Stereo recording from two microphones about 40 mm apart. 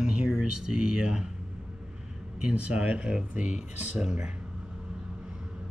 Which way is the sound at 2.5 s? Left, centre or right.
Right.